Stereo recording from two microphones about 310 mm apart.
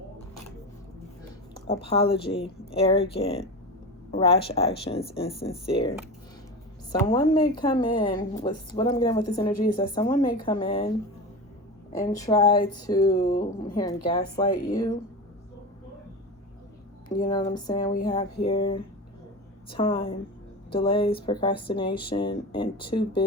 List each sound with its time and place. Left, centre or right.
1.6 s speech: centre
6.9 s speech: centre
11.9 s speech: centre
13.1 s speech: left
13.7 s speech: centre
17.2 s speech: centre